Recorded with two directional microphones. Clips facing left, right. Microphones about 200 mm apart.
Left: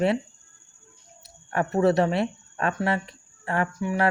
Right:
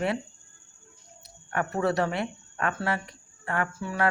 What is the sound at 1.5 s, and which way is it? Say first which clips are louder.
Speech: left 5 dB; 25° left (ahead or behind).